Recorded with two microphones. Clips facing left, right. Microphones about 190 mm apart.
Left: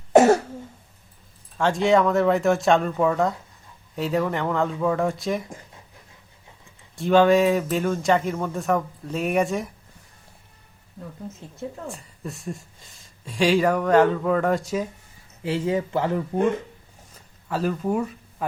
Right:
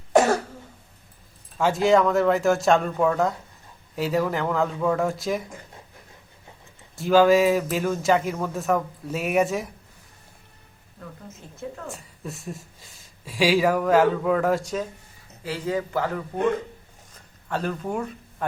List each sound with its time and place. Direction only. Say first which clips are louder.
0.1 s cough: left 4 dB; 25° left (ahead or behind)
1.5 s speech: even; 5° right (ahead or behind)
6.9 s speech: even; centre (ahead or behind)
11.9 s speech: left 1 dB; centre (ahead or behind)
15.4 s speech: left 3 dB; 25° left (ahead or behind)
17.5 s speech: left 3 dB; 5° left (ahead or behind)